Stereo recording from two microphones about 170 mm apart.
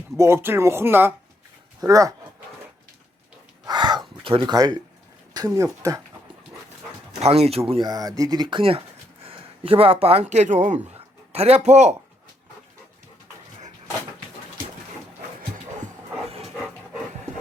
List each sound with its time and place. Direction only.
0.2 s speech: 15° right (ahead or behind)
3.7 s gasp: 25° right (ahead or behind)
5.4 s speech: 25° right (ahead or behind)
7.2 s speech: 35° right (ahead or behind)